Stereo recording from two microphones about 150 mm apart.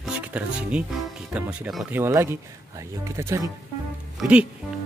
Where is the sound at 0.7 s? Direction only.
5° right (ahead or behind).